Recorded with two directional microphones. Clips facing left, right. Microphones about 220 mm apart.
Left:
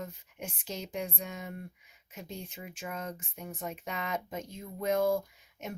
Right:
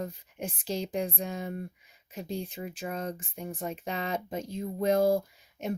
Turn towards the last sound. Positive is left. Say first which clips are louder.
# right 6 dB
turn(degrees=-35)  # may be behind; listen again after turning